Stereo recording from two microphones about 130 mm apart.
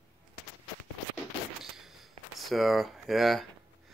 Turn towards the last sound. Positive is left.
turn(degrees=0)  # may be behind; listen again after turning